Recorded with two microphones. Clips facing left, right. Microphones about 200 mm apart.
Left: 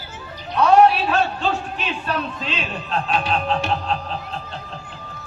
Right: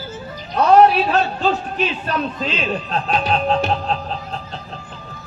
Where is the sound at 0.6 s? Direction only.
40° right (ahead or behind).